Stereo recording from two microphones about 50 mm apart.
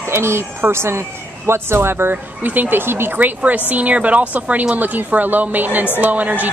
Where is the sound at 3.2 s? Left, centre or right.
Right.